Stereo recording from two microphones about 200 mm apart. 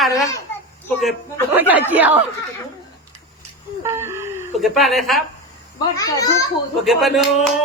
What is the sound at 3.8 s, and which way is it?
Wheeze, 10° right (ahead or behind).